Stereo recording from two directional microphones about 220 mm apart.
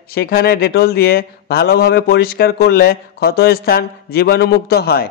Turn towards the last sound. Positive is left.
turn(degrees=45)  # may be behind; listen again after turning